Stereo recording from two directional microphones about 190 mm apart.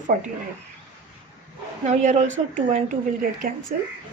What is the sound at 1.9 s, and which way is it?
A woman's voice, 40° right (ahead or behind).